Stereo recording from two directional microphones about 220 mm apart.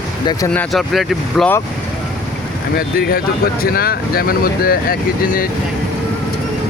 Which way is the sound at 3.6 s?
45° left (ahead or behind).